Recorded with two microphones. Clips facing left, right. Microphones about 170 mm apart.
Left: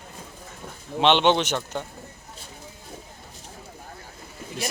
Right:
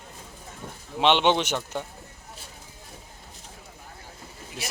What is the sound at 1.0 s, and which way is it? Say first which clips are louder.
Speech: left 2 dB; 10° right (ahead or behind).